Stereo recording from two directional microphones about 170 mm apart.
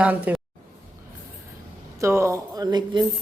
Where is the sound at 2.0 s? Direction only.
15° right (ahead or behind).